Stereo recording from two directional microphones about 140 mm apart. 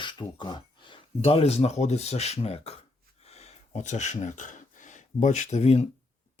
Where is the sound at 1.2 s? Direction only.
45° left (ahead or behind).